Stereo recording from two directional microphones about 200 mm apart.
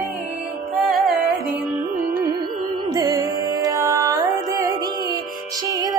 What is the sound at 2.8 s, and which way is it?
Music, 20° right (ahead or behind).